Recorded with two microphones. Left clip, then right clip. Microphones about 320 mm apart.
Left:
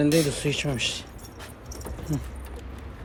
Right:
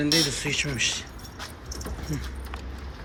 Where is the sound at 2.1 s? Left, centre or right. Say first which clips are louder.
Left 4 dB; centre.